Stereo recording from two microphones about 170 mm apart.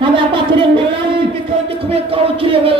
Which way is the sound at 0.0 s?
30° right (ahead or behind).